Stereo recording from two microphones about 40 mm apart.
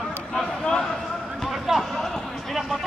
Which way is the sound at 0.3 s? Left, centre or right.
Centre.